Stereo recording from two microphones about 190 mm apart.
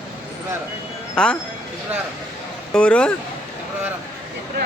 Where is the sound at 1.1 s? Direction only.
5° left (ahead or behind).